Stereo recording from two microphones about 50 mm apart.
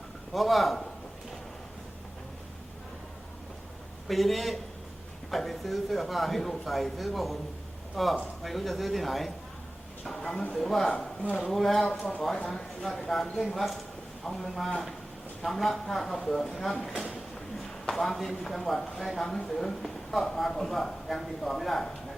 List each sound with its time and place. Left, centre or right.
0.3 s a man's voice: centre
4.1 s a man's voice: centre
12.4 s speech: centre
12.8 s a man's voice: centre